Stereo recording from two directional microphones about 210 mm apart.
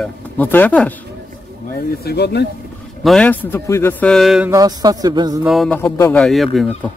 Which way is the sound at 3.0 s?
5° left (ahead or behind).